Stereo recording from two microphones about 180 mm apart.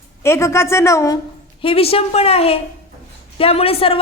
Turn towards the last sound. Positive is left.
turn(degrees=30)  # may be behind; listen again after turning